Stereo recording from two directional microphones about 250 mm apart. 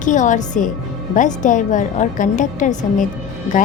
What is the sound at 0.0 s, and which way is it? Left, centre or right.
A woman's voice, left.